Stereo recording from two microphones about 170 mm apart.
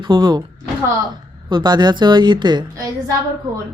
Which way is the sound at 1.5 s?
25° right (ahead or behind).